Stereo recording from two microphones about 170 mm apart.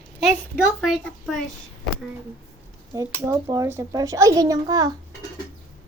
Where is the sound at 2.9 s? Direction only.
20° right (ahead or behind).